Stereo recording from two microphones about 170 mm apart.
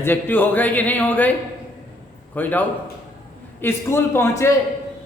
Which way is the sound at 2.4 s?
10° left (ahead or behind).